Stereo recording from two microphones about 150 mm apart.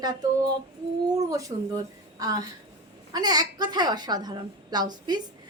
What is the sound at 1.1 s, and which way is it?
A woman's voice, 20° right (ahead or behind).